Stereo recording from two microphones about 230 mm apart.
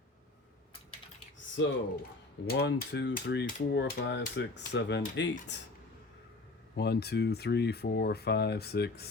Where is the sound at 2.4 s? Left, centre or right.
Left.